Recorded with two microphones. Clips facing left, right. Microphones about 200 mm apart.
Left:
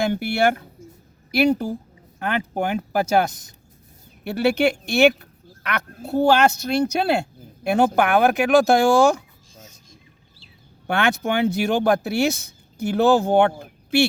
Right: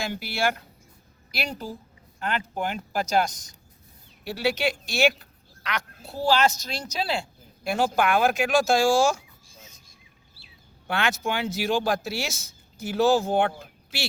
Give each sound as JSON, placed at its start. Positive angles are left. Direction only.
{"t": 0.0, "sound": "speech", "side_deg": 55}
{"t": 10.8, "sound": "speech", "side_deg": 60}